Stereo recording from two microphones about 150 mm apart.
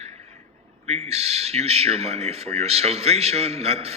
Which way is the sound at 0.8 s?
45° right (ahead or behind).